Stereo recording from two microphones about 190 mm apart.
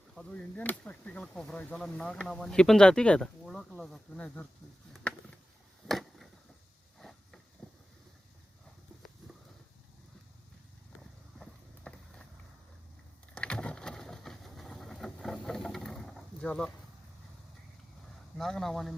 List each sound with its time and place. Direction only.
0.1 s speech: 5° left (ahead or behind)
5.9 s a sound: centre (ahead or behind)
11.9 s vehicle: 5° left (ahead or behind)
13.3 s vehicle: 5° left (ahead or behind)
18.3 s speech: centre (ahead or behind)